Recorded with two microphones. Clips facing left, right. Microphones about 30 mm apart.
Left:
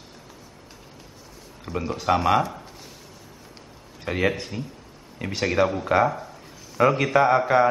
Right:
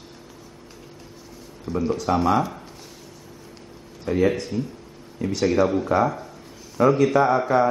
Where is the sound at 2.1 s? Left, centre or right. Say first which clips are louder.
Left 1 dB; left.